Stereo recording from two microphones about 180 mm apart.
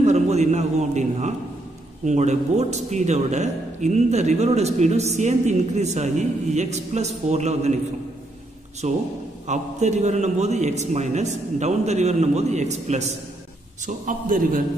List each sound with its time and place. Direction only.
0.0 s a man's voice: 40° right (ahead or behind)
8.8 s a man's voice: 40° right (ahead or behind)